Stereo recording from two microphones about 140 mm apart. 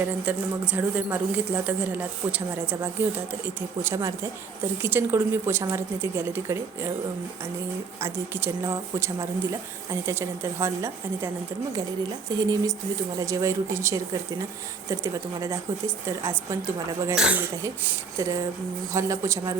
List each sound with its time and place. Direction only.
0.0 s a woman's voice: 10° right (ahead or behind)
8.0 s speech: 20° right (ahead or behind)
12.4 s speech: 25° right (ahead or behind)
17.2 s a woman's voice: 10° right (ahead or behind)
18.2 s speech: 20° right (ahead or behind)